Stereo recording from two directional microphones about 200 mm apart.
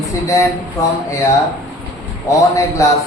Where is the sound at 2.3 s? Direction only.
15° left (ahead or behind).